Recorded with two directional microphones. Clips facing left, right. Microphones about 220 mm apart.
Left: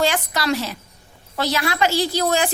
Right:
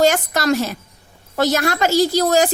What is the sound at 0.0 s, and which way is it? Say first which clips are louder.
A woman's voice: right 5 dB; 45° right (ahead or behind).